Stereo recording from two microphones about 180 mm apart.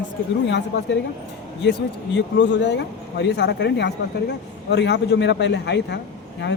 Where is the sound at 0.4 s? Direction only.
80° left.